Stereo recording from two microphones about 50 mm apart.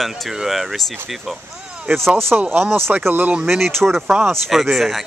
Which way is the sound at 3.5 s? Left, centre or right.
Centre.